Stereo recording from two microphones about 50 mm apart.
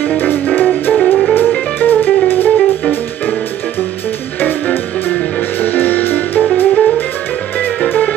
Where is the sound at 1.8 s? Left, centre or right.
Left.